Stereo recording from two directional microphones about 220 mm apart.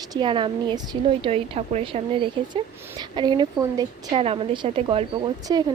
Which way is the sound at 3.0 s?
20° right (ahead or behind).